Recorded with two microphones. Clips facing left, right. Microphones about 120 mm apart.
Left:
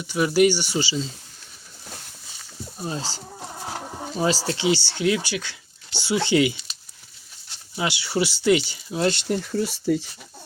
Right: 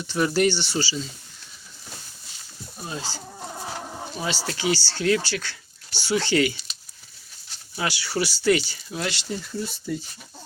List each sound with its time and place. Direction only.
0.1 s speech: 10° left (ahead or behind)
2.9 s speech: 35° left (ahead or behind)
4.2 s speech: 35° left (ahead or behind)
4.5 s speech: 20° left (ahead or behind)
7.8 s speech: 20° left (ahead or behind)
9.0 s speech: 50° left (ahead or behind)
9.5 s speech: 80° left